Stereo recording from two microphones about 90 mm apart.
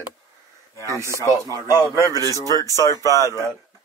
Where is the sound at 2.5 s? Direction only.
35° left (ahead or behind).